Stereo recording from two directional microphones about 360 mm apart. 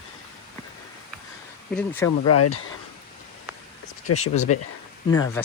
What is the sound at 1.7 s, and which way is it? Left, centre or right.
Speech, centre.